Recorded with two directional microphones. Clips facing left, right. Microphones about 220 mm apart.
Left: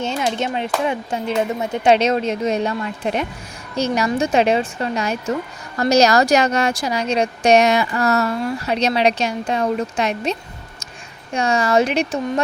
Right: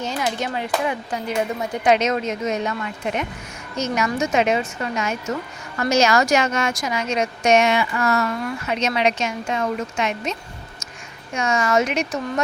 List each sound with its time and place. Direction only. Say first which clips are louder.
0.0 s speech: left 3 dB; 25° left (ahead or behind)
11.3 s speech: left 3 dB; 35° left (ahead or behind)